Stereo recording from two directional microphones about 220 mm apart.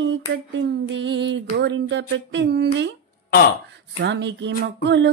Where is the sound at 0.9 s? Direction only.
50° right (ahead or behind).